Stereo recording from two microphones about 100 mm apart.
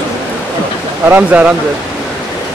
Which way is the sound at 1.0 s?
15° right (ahead or behind).